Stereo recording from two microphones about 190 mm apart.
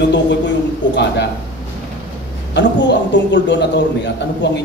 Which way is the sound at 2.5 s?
70° left (ahead or behind).